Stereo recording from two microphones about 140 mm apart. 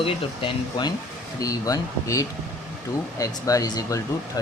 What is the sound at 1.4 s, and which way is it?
Speech, 25° left (ahead or behind).